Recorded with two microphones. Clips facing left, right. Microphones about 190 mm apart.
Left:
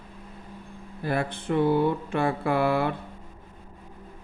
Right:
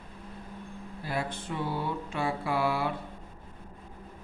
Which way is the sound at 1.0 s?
55° left (ahead or behind).